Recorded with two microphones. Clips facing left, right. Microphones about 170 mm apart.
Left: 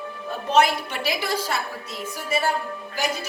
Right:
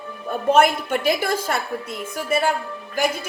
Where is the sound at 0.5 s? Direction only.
50° right (ahead or behind).